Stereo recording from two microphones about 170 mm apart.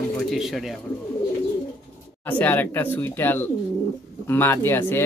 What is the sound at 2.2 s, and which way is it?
Speech, 10° left (ahead or behind).